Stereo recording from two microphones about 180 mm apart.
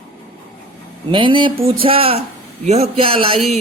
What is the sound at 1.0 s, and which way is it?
Speech, 30° right (ahead or behind).